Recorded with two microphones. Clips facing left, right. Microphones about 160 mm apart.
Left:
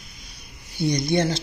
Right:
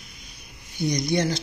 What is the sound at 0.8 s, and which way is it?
Speech, 30° left (ahead or behind).